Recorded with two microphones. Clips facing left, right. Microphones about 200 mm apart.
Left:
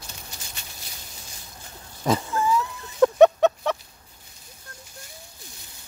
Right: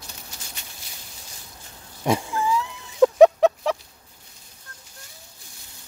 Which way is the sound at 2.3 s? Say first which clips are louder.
Left 1 dB; 10° right (ahead or behind).